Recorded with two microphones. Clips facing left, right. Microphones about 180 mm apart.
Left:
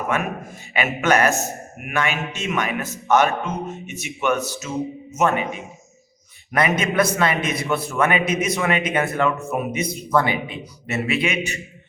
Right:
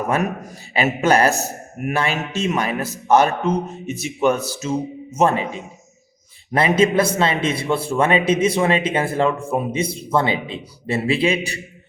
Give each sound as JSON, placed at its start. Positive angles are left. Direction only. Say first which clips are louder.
{"t": 0.7, "sound": "a man's voice", "louder": "right 3 dB", "side_deg": -35}